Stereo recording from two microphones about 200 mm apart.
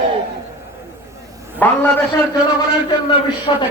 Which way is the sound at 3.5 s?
25° left (ahead or behind).